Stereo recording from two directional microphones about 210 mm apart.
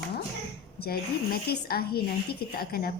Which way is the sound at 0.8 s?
50° left (ahead or behind).